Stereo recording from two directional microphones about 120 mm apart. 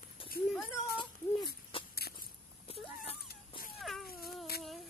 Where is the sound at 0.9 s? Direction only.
45° left (ahead or behind).